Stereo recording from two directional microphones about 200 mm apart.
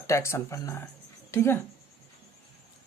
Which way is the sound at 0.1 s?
15° left (ahead or behind).